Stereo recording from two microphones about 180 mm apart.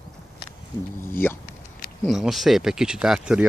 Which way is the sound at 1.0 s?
10° left (ahead or behind).